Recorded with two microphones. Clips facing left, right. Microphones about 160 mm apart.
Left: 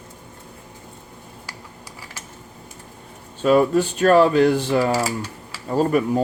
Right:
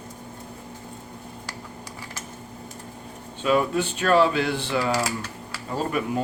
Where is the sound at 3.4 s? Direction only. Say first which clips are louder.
Left 6 dB; 40° left (ahead or behind).